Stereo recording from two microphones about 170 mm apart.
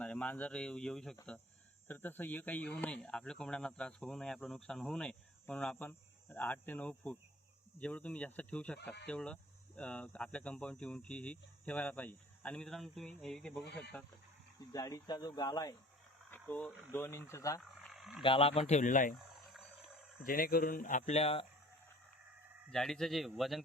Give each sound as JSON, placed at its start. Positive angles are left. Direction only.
{"t": 0.0, "sound": "speech", "side_deg": 5}
{"t": 14.7, "sound": "speech", "side_deg": 20}
{"t": 16.3, "sound": "a sound", "side_deg": 10}
{"t": 16.9, "sound": "speech", "side_deg": 15}
{"t": 17.9, "sound": "wild animals", "side_deg": 0}
{"t": 18.2, "sound": "speech", "side_deg": 30}
{"t": 20.2, "sound": "speech", "side_deg": 60}
{"t": 22.7, "sound": "speech", "side_deg": 5}